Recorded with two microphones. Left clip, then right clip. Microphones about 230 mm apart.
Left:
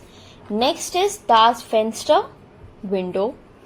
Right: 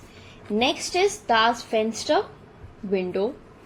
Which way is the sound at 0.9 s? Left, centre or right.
Left.